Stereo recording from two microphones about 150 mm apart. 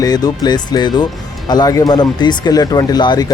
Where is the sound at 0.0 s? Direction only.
25° left (ahead or behind).